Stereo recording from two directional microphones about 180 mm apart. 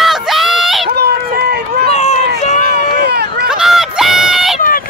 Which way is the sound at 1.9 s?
35° left (ahead or behind).